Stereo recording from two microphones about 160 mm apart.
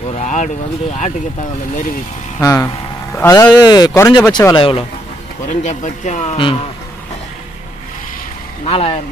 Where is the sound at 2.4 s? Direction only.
20° left (ahead or behind).